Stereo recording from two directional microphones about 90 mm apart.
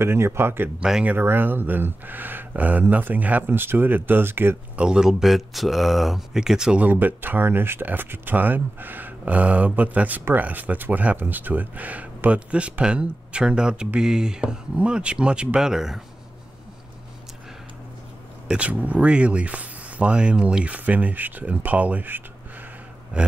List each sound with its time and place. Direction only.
0.0 s speech: 30° right (ahead or behind)
0.7 s speech: 5° right (ahead or behind)
1.0 s speech: 25° right (ahead or behind)
4.7 s speech: 10° right (ahead or behind)
6.9 s speech: 20° right (ahead or behind); by 16.0 s 5° right (ahead or behind)
18.5 s speech: 15° right (ahead or behind)